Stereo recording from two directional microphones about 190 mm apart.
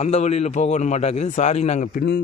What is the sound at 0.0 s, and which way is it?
A man's voice, 35° left (ahead or behind).